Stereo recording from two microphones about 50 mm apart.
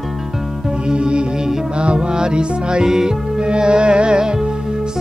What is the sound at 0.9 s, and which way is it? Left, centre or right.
Music, centre.